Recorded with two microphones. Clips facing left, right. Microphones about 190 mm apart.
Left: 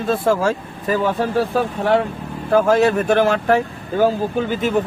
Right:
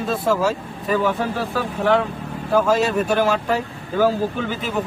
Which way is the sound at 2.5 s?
55° left (ahead or behind).